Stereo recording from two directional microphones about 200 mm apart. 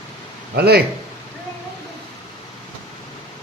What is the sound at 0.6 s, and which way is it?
Speech, 55° right (ahead or behind).